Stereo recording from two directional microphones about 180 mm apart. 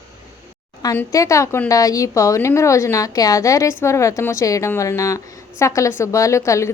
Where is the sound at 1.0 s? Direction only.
15° left (ahead or behind).